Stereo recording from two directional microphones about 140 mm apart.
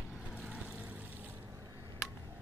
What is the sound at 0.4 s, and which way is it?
Vehicle, 10° right (ahead or behind).